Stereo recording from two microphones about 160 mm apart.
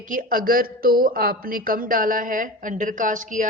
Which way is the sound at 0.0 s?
60° right (ahead or behind).